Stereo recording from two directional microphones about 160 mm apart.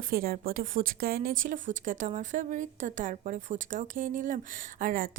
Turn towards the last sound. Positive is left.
turn(degrees=-55)  # may be behind; listen again after turning